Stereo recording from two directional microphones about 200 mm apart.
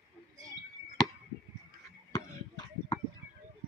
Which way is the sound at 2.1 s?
20° left (ahead or behind).